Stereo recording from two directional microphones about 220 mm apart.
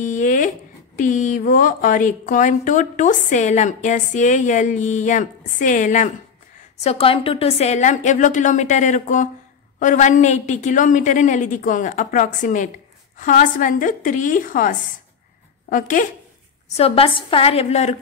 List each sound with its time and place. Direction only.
0.0 s a sound: 35° left (ahead or behind)
0.9 s speech: 35° left (ahead or behind)
16.7 s a woman's voice: 25° left (ahead or behind)